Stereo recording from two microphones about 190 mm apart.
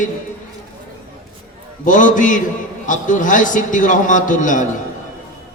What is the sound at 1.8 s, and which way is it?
A man's voice, 40° left (ahead or behind).